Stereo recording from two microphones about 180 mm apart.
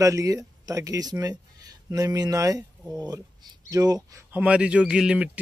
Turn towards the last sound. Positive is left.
turn(degrees=-5)  # may be behind; listen again after turning